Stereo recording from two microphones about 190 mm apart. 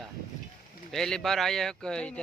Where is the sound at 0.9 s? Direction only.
Centre (ahead or behind).